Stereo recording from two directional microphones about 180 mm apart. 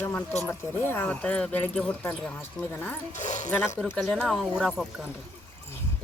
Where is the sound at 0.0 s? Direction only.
10° left (ahead or behind).